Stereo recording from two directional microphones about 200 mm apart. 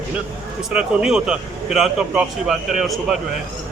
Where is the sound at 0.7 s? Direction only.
5° right (ahead or behind).